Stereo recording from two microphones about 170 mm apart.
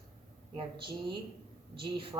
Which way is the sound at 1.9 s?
30° right (ahead or behind).